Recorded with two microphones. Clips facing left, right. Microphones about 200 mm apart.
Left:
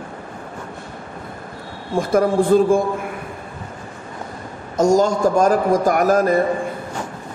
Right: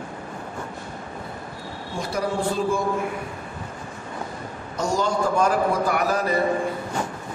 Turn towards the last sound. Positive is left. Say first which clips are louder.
# left 7 dB
turn(degrees=45)  # may be behind; listen again after turning